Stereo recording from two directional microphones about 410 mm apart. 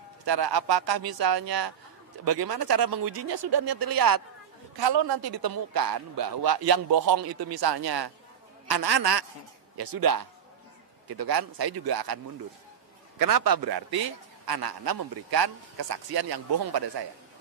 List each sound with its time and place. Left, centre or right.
0.2 s a man's voice: right
4.7 s a man's voice: right
9.8 s a man's voice: right
13.2 s a man's voice: right